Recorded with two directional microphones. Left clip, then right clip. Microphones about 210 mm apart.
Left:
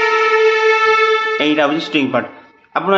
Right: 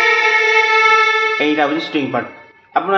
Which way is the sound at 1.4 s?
30° left (ahead or behind).